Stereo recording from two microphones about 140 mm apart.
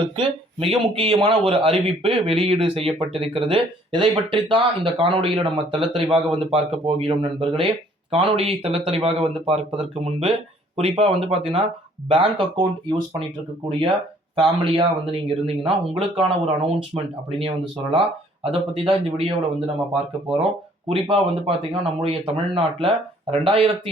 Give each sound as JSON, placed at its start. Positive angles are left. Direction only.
{"t": 0.0, "sound": "speech", "side_deg": -40}
{"t": 14.3, "sound": "speech", "side_deg": -35}
{"t": 18.7, "sound": "speech", "side_deg": -40}